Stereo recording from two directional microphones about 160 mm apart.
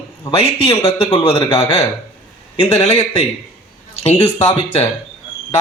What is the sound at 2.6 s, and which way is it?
A man's voice, 40° left (ahead or behind).